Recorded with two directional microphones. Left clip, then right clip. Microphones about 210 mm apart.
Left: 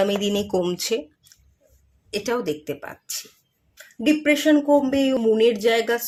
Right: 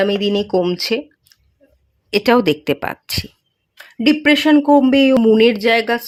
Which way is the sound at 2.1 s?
40° right (ahead or behind).